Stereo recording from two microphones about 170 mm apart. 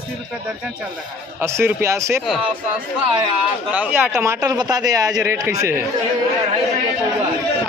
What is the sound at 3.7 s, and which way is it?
Speech, 10° right (ahead or behind).